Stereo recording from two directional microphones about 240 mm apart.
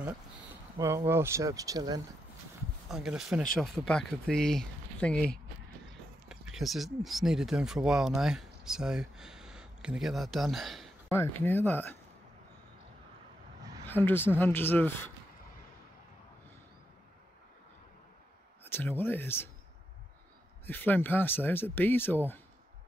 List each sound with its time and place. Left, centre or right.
0.7 s speech: centre
2.9 s speech: centre
13.8 s speech: centre
18.6 s speech: centre
20.6 s speech: centre